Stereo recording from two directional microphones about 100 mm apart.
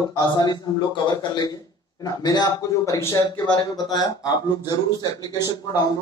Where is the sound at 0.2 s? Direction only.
45° left (ahead or behind).